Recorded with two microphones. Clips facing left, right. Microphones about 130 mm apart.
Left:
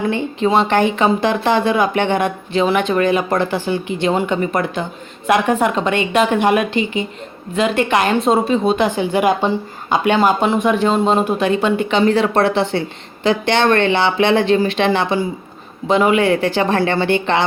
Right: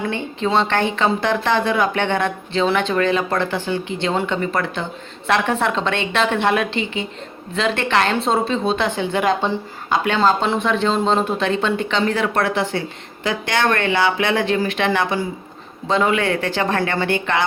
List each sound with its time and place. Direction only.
0.1 s a woman's voice: 15° left (ahead or behind)